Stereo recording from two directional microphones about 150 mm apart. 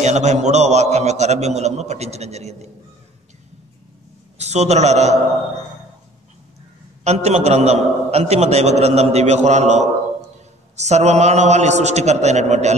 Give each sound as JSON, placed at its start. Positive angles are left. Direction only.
{"t": 0.0, "sound": "a man's voice", "side_deg": -50}
{"t": 4.4, "sound": "a man's voice", "side_deg": -45}
{"t": 7.1, "sound": "a man's voice", "side_deg": -50}